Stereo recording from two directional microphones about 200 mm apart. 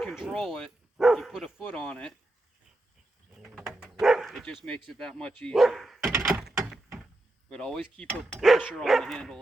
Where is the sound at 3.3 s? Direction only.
5° right (ahead or behind).